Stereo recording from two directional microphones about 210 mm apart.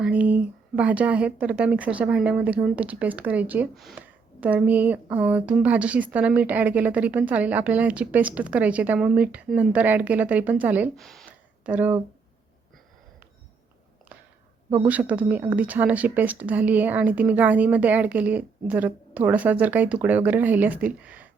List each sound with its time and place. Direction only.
0.0 s speech: 5° right (ahead or behind)
14.8 s speech: 5° right (ahead or behind)